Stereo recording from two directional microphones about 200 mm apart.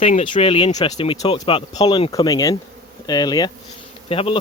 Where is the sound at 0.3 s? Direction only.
25° left (ahead or behind).